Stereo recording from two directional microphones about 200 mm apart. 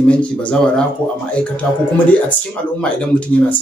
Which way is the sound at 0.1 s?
5° left (ahead or behind).